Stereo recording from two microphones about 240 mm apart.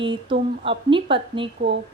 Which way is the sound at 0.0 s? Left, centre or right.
Right.